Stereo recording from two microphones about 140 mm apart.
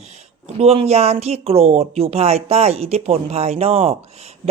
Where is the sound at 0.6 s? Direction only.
45° right (ahead or behind).